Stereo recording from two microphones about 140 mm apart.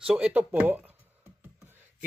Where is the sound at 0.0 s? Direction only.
10° right (ahead or behind).